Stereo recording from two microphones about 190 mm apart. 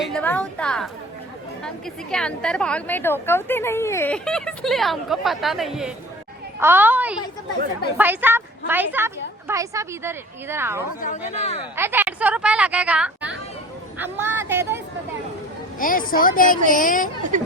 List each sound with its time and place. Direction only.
0.0 s a woman's voice: 5° left (ahead or behind); by 10.8 s 15° right (ahead or behind)
11.0 s speech: 40° left (ahead or behind)
11.8 s a woman's voice: 10° right (ahead or behind)
15.8 s speech: 45° left (ahead or behind)